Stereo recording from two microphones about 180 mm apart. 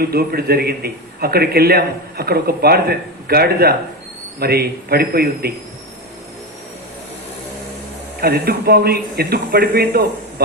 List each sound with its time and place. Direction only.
0.0 s a man's voice: 60° right (ahead or behind)
8.2 s a man's voice: 60° right (ahead or behind)